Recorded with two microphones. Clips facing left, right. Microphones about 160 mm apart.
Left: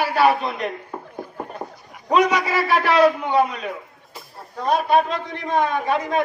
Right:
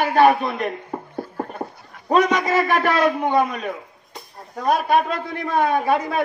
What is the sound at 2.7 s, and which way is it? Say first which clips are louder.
Speech: left 2 dB; 50° right (ahead or behind).